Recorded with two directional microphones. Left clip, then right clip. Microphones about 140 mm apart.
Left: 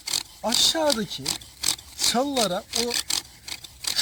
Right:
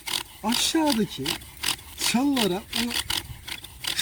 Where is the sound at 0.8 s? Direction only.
10° right (ahead or behind).